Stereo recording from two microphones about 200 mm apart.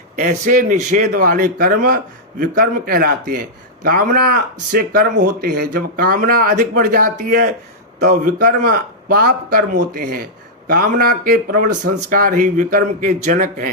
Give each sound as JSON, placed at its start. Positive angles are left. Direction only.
{"t": 0.2, "sound": "a man's voice", "side_deg": -40}